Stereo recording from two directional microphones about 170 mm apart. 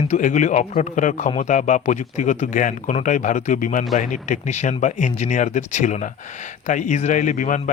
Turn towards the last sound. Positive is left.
turn(degrees=50)  # may be behind; listen again after turning